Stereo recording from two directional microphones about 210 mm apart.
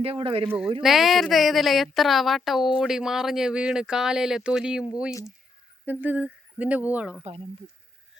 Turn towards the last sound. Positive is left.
turn(degrees=-5)  # may be behind; listen again after turning